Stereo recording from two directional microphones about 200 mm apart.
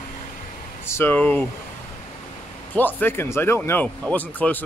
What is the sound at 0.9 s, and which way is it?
Speech, 10° left (ahead or behind).